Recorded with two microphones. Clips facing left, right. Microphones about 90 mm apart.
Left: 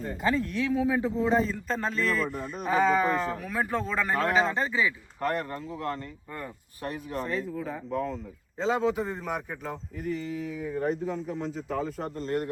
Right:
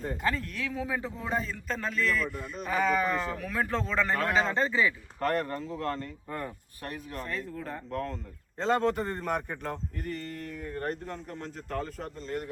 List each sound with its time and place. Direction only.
0.2 s a man's voice: 20° left (ahead or behind)
1.4 s speech: 30° left (ahead or behind)
2.6 s a man's voice: 25° left (ahead or behind)
7.3 s a man's voice: 5° left (ahead or behind)
12.1 s a man's voice: 45° left (ahead or behind)